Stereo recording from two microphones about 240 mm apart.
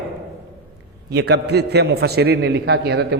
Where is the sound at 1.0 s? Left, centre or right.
Right.